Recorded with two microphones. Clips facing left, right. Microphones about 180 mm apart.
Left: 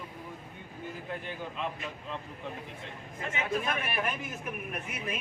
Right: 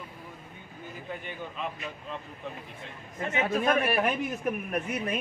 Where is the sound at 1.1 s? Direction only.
Centre (ahead or behind).